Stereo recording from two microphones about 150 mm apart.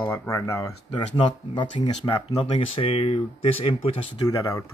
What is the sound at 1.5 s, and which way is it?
Speech, 35° left (ahead or behind).